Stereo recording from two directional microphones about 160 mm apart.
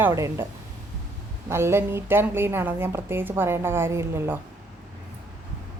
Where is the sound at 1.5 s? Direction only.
15° right (ahead or behind).